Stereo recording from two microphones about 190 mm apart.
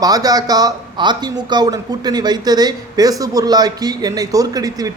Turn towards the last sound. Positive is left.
turn(degrees=-20)  # may be behind; listen again after turning